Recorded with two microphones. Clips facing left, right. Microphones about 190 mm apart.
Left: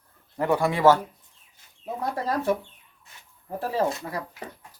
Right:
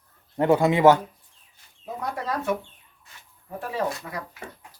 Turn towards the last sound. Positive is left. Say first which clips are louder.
# left 2 dB
turn(degrees=30)  # may be behind; listen again after turning